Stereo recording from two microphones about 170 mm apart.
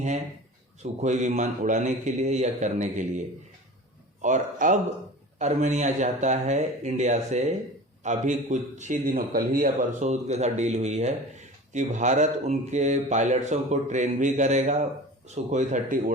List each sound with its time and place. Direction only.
0.8 s a man's voice: 45° right (ahead or behind)